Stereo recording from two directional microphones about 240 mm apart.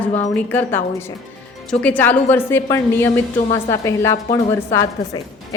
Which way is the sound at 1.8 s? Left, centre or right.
Centre.